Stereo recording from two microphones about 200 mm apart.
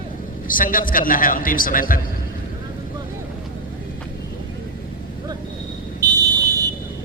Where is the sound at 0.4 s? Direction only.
45° left (ahead or behind).